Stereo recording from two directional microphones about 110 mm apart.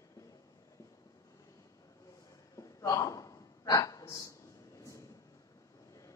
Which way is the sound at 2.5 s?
30° left (ahead or behind).